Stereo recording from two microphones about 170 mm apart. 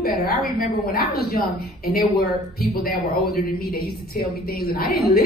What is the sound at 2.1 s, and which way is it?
A woman's voice, 65° left (ahead or behind).